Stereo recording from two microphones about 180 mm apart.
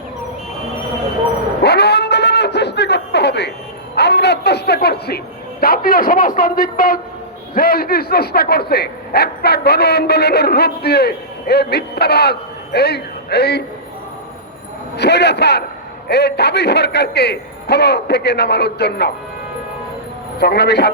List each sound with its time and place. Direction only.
1.6 s a sound: 65° left (ahead or behind); by 7.0 s 50° left (ahead or behind)
7.5 s speech: 55° left (ahead or behind)
14.9 s a man's voice: 65° left (ahead or behind)
20.4 s speech: 65° left (ahead or behind)